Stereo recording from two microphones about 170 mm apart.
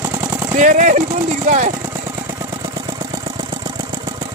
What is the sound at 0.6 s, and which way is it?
Speech, 50° right (ahead or behind).